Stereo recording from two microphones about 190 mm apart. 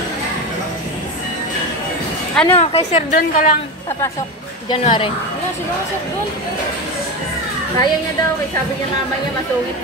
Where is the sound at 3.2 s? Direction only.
45° left (ahead or behind).